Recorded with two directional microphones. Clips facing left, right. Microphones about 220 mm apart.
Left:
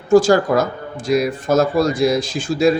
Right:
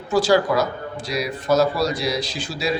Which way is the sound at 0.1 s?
45° left (ahead or behind).